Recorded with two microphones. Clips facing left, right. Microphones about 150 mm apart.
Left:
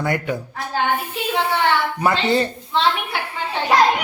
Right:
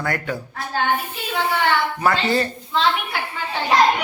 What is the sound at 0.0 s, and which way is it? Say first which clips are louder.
Speech: left 3 dB; 20° left (ahead or behind).